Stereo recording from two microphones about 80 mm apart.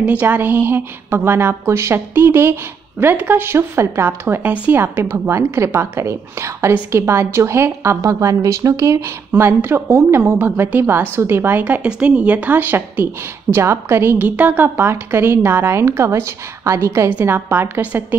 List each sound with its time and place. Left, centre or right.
0.0 s a woman's voice: centre
4.4 s a woman's voice: right
10.4 s a woman's voice: right
14.1 s a woman's voice: centre